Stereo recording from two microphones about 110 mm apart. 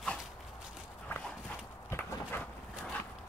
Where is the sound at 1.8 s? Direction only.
25° left (ahead or behind).